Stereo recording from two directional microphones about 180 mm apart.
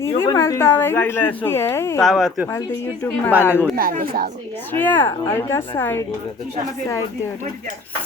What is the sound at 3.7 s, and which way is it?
Speech, 55° right (ahead or behind).